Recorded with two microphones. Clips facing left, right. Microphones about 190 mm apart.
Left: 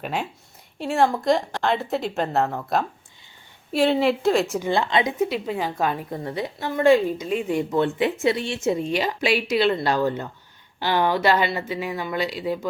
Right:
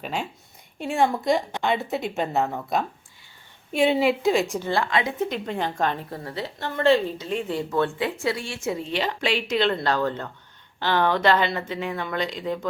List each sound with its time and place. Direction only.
0.0 s a woman's voice: 5° left (ahead or behind)
4.5 s speech: 15° left (ahead or behind)
5.2 s speech: 5° left (ahead or behind)